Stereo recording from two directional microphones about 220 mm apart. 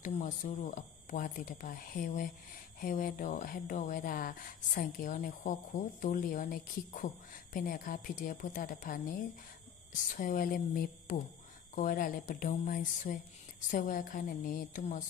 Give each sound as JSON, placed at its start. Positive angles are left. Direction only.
{"t": 0.0, "sound": "speech", "side_deg": 30}